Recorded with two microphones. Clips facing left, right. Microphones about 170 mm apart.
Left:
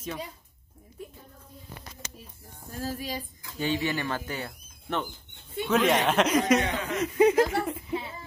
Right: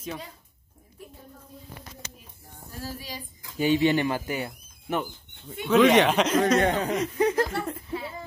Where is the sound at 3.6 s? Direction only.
15° right (ahead or behind).